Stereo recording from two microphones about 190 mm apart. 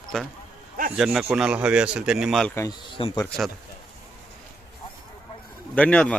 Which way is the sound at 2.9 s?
30° left (ahead or behind).